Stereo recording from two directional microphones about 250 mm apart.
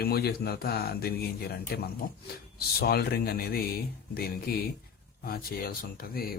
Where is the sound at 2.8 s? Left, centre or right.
Left.